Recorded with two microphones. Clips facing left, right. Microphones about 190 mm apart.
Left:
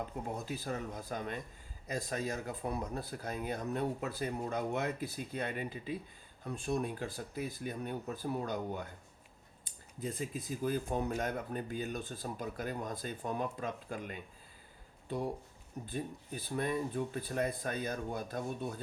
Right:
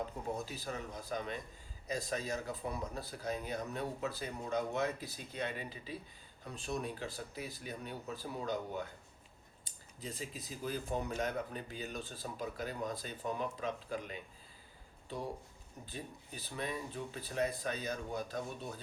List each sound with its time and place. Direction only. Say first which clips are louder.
0.4 s speech: left 4 dB; 55° left (ahead or behind)
15.9 s speech: left 7 dB; 50° left (ahead or behind)